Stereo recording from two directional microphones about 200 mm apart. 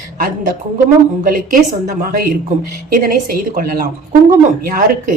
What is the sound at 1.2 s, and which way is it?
Speech, 45° right (ahead or behind).